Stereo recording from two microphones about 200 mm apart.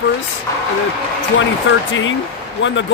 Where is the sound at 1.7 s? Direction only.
70° left (ahead or behind).